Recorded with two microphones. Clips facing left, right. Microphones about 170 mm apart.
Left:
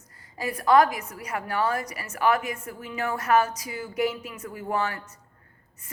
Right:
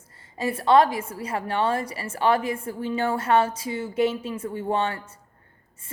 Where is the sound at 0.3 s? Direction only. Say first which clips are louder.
Right 1 dB; 25° right (ahead or behind).